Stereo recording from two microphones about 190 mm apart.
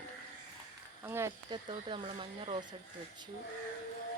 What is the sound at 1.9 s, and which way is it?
Speech, 25° right (ahead or behind).